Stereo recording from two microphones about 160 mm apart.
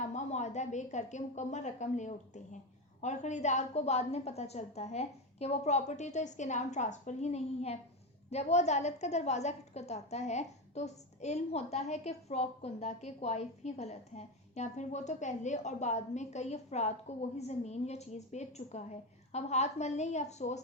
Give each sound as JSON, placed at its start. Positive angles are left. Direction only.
{"t": 0.0, "sound": "a woman's voice", "side_deg": 45}